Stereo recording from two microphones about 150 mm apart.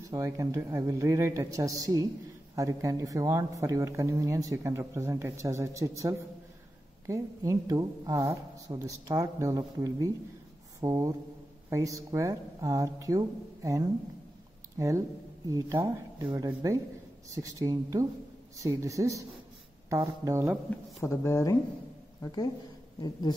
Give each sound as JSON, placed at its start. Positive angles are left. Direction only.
{"t": 0.1, "sound": "speech", "side_deg": -20}
{"t": 20.7, "sound": "a sound", "side_deg": 10}
{"t": 21.0, "sound": "speech", "side_deg": 20}